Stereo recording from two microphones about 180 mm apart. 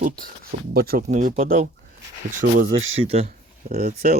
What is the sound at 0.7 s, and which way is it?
Speech, 60° right (ahead or behind).